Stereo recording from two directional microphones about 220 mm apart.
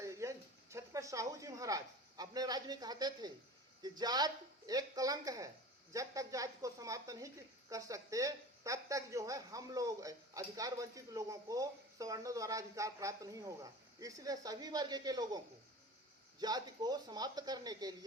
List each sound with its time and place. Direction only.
0.0 s speech: 15° right (ahead or behind)
16.4 s speech: 20° right (ahead or behind)